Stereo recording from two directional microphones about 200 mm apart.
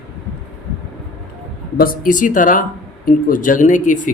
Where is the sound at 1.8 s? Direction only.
40° left (ahead or behind).